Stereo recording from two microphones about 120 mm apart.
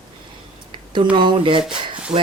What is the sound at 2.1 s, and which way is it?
Speech, 75° right (ahead or behind).